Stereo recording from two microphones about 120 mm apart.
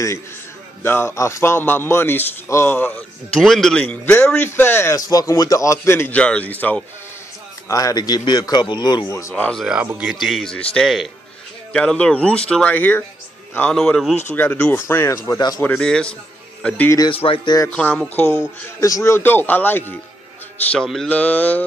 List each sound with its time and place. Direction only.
0.8 s a man's voice: 20° left (ahead or behind)
3.3 s a man's voice: centre (ahead or behind)
7.6 s speech: 30° left (ahead or behind)
9.3 s a man's voice: 5° left (ahead or behind)
14.3 s a man's voice: 15° left (ahead or behind)
15.6 s a man's voice: 10° left (ahead or behind)
17.1 s speech: 50° left (ahead or behind)
17.6 s a man's voice: 10° left (ahead or behind)
18.8 s a man's voice: 25° left (ahead or behind)
20.7 s a man's voice: 5° left (ahead or behind)